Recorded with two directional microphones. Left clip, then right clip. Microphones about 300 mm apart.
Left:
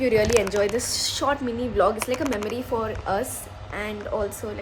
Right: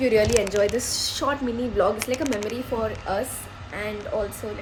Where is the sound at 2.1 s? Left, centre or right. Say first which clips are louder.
Even; centre.